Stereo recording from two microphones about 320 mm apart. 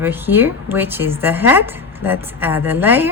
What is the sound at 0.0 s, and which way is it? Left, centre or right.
A woman's voice, centre.